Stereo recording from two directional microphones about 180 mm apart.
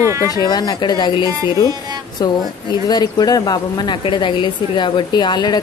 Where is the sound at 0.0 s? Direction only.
15° right (ahead or behind).